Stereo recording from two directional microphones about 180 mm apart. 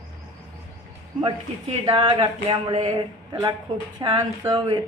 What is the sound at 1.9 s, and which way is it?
Speech, 25° right (ahead or behind).